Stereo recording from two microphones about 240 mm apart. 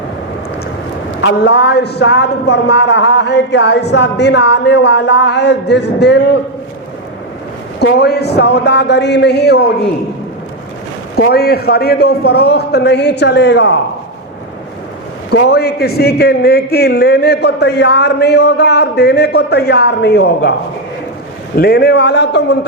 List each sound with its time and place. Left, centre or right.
1.2 s a man's voice: left
7.8 s a man's voice: left
11.2 s a man's voice: left
15.3 s a man's voice: left
21.6 s a man's voice: left